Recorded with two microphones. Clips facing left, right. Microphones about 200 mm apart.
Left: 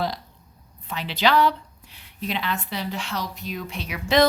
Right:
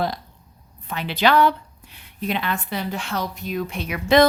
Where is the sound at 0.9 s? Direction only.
55° right (ahead or behind).